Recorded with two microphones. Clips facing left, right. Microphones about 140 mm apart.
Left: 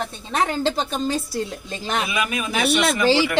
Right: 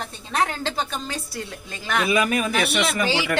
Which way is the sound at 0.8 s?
25° left (ahead or behind).